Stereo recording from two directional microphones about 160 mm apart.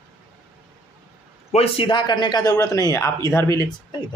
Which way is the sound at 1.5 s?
35° left (ahead or behind).